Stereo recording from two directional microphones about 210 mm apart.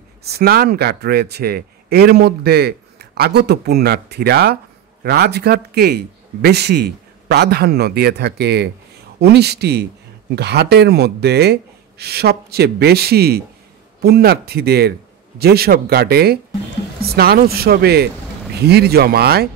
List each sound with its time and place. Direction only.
0.2 s a man's voice: 50° right (ahead or behind)